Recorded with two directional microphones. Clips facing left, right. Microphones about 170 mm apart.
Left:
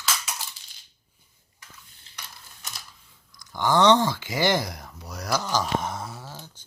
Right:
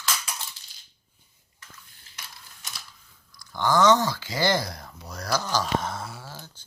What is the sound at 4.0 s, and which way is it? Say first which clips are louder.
Speech: left 2 dB; 20° left (ahead or behind).